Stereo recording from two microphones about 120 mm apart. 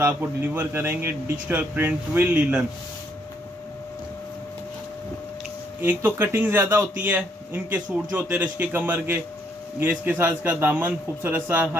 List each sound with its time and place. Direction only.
0.0 s a man's voice: 15° right (ahead or behind)
5.8 s a man's voice: 15° right (ahead or behind)